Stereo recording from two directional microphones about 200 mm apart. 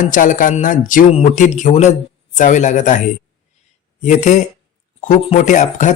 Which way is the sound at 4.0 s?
35° left (ahead or behind).